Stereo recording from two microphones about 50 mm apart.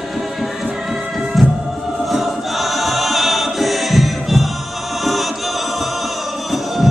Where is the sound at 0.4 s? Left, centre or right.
Centre.